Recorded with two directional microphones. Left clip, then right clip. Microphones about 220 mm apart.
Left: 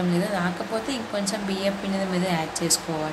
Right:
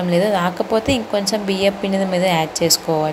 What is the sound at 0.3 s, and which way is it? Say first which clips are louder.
Speech: right 9 dB; 30° right (ahead or behind).